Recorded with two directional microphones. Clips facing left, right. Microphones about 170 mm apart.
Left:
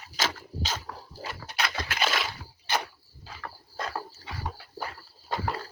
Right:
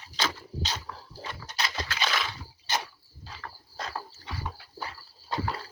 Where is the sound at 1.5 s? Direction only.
55° left (ahead or behind).